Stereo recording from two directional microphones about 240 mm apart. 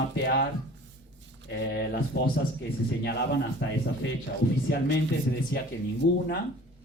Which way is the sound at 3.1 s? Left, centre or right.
Left.